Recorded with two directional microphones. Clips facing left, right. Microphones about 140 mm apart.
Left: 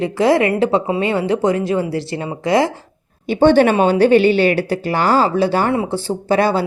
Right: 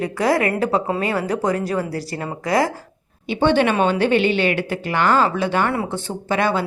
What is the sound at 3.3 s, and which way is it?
A woman's voice, 45° left (ahead or behind).